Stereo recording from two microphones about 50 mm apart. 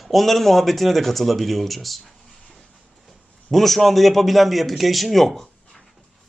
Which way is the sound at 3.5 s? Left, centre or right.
Centre.